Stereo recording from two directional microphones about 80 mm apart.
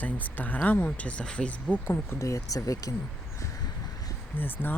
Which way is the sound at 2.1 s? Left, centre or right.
Left.